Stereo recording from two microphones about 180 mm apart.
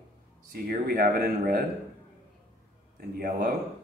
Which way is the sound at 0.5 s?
55° right (ahead or behind).